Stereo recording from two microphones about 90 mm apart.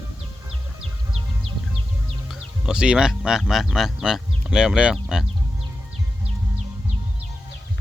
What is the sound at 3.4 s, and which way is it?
Speech, centre (ahead or behind).